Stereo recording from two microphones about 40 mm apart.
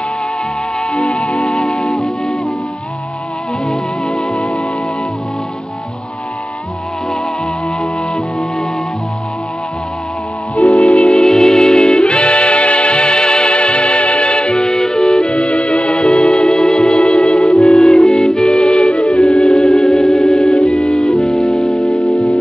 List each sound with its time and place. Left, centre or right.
0.9 s music: left
3.6 s music: centre
10.5 s music: left
14.6 s music: centre; by 22.4 s left